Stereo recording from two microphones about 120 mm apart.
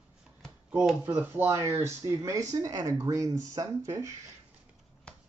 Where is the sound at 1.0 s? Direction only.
15° right (ahead or behind).